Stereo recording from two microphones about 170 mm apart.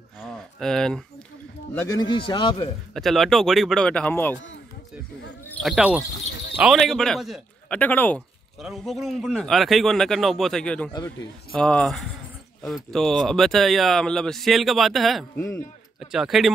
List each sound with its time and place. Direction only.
0.2 s a sound: 5° left (ahead or behind)
1.7 s speech: 10° left (ahead or behind)
2.0 s speech: 30° left (ahead or behind)
2.9 s speech: centre (ahead or behind)
5.6 s speech: 5° right (ahead or behind)
7.8 s speech: 10° left (ahead or behind)
8.5 s speech: centre (ahead or behind)